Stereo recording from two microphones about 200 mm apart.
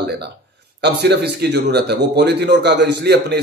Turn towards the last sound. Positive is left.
turn(degrees=-55)  # may be behind; listen again after turning